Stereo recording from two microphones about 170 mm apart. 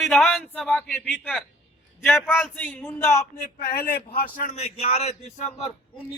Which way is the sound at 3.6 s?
60° left (ahead or behind).